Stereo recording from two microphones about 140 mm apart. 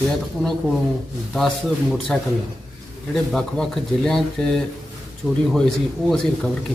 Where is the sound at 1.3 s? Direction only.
Centre (ahead or behind).